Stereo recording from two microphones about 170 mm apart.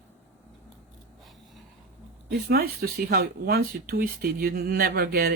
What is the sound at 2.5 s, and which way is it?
Speech, 65° right (ahead or behind).